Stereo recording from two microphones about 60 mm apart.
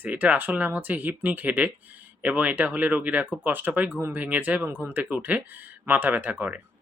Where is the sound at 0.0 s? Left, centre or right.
Right.